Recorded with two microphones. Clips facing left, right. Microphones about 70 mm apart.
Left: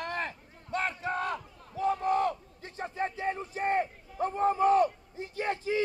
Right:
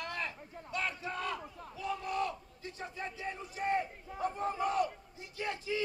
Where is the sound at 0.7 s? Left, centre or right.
Left.